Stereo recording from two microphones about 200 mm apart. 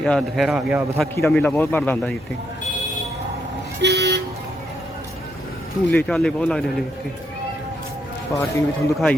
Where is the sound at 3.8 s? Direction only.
55° right (ahead or behind).